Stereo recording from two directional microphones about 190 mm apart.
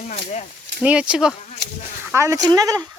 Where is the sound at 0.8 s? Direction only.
5° right (ahead or behind).